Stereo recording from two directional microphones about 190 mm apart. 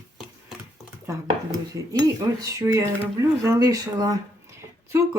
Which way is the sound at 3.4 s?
20° right (ahead or behind).